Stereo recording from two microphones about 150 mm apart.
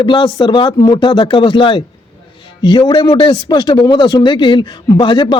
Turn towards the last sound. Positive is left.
turn(degrees=35)  # may be behind; listen again after turning